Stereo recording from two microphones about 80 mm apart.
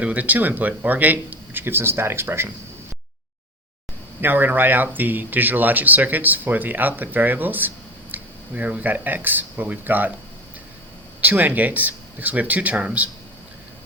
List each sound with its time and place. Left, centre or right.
0.0 s speech: centre
4.2 s speech: right
11.2 s speech: right